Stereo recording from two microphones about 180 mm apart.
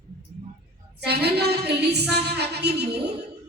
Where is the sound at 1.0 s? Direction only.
65° right (ahead or behind).